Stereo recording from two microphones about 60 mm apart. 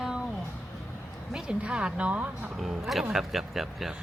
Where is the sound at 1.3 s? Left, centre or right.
Centre.